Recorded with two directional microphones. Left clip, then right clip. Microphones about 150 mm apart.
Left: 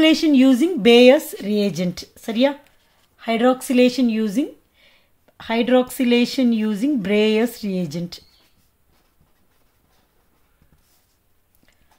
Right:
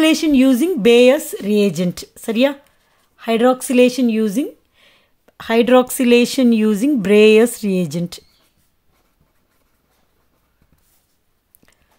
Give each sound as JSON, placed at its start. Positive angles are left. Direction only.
{"t": 0.0, "sound": "speech", "side_deg": -35}